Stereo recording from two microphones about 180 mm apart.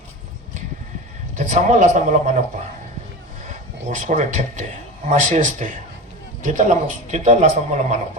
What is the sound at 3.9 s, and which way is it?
A man's voice, 45° right (ahead or behind).